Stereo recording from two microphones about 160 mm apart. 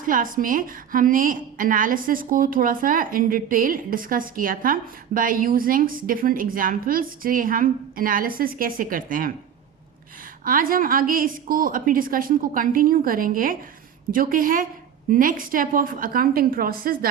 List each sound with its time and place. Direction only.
0.0 s a woman's voice: 60° right (ahead or behind)
10.4 s a woman's voice: 60° right (ahead or behind)